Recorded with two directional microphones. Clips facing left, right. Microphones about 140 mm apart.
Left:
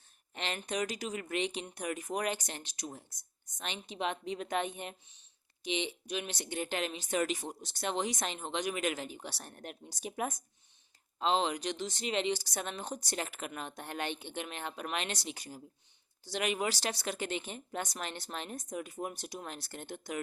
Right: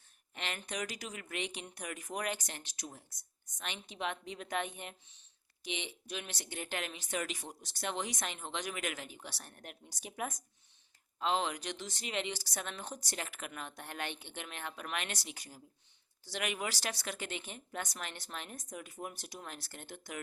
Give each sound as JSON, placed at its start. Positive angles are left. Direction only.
{"t": 0.3, "sound": "speech", "side_deg": 30}